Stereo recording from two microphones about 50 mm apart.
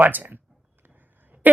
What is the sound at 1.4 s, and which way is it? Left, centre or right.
Speech, right.